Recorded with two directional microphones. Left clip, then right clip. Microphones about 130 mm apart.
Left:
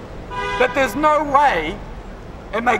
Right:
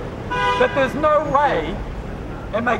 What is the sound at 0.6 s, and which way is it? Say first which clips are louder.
A man's voice: left 5 dB; 20° left (ahead or behind).